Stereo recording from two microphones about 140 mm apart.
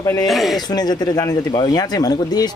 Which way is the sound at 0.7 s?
30° left (ahead or behind).